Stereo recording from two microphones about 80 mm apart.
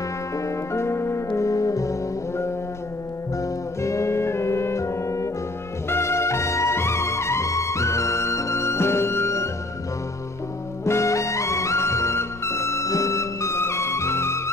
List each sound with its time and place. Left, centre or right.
0.4 s music: left
10.9 s music: left